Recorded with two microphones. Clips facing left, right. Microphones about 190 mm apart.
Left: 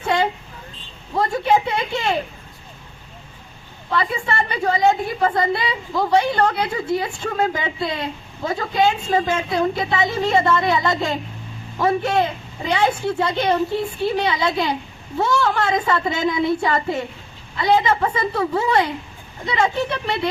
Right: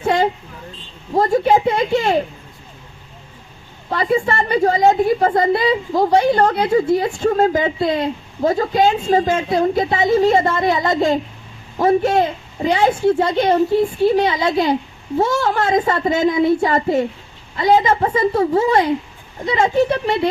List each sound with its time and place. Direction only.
0.0 s a sound: 35° right (ahead or behind)
1.1 s a woman's voice: 40° right (ahead or behind)
3.8 s a woman's voice: 40° right (ahead or behind)